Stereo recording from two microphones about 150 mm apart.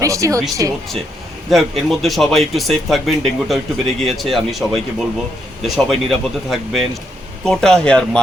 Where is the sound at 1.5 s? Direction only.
Centre (ahead or behind).